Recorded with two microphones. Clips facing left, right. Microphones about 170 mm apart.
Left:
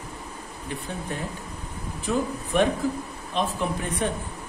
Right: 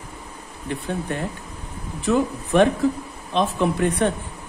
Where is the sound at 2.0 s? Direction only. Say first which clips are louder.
Right 6 dB; 85° right.